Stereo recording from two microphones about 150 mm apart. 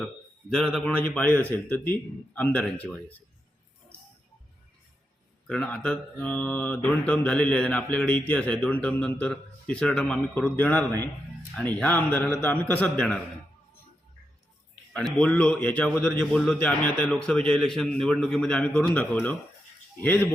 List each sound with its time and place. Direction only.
0.5 s a man's voice: centre (ahead or behind)
5.5 s speech: 5° left (ahead or behind)
14.9 s a man's voice: 5° left (ahead or behind)